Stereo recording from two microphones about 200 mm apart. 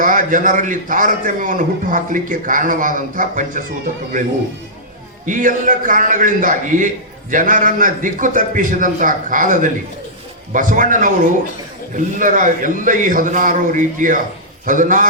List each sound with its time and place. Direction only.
0.0 s a man's voice: 40° right (ahead or behind)
5.2 s a man's voice: 40° right (ahead or behind)